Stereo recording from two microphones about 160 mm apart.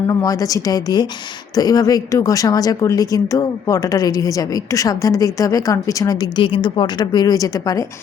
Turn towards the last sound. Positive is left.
turn(degrees=20)  # may be behind; listen again after turning